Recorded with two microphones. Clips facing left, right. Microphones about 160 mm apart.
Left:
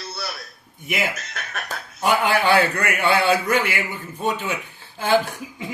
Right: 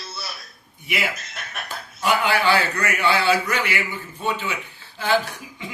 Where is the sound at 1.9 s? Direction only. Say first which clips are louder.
Left 1 dB; 50° left (ahead or behind).